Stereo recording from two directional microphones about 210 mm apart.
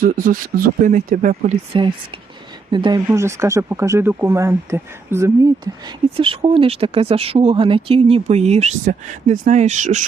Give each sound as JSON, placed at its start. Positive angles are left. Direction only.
{"t": 0.0, "sound": "speech", "side_deg": -40}
{"t": 6.1, "sound": "speech", "side_deg": -25}